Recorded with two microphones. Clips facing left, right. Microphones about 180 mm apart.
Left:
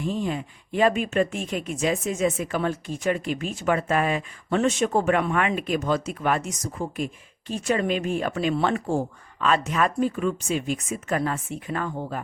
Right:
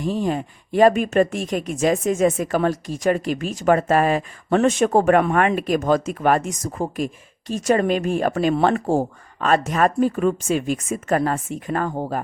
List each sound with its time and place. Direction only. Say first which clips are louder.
0.0 s speech: right 4 dB; 45° right (ahead or behind)